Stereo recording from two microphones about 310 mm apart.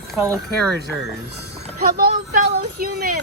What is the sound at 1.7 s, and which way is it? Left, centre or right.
Speech, right.